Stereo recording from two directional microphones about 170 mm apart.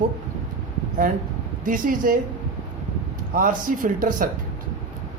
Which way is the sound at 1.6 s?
55° right (ahead or behind).